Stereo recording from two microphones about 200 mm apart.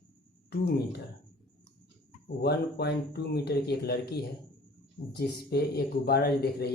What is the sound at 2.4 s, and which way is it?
Speech, 55° left (ahead or behind).